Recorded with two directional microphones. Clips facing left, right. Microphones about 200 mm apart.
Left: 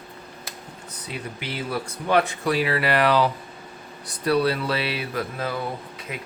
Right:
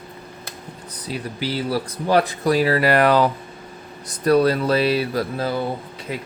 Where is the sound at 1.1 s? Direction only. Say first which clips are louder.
Right 7 dB; 35° right (ahead or behind).